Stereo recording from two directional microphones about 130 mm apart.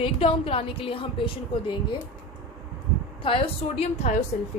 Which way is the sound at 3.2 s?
40° left (ahead or behind).